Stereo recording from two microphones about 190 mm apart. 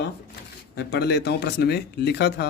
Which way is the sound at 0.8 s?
65° left (ahead or behind).